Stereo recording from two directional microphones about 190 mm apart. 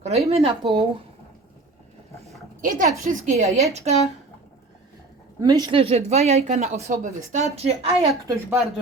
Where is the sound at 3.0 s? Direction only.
35° right (ahead or behind).